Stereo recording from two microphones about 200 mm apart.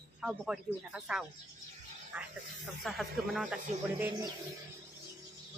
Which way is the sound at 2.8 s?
Centre (ahead or behind).